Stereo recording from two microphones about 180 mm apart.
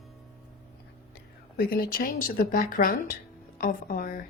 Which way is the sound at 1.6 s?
55° left (ahead or behind).